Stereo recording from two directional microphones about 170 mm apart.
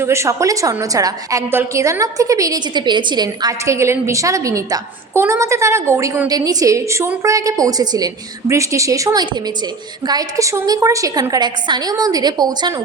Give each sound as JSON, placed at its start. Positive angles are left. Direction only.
{"t": 0.0, "sound": "a woman's voice", "side_deg": -15}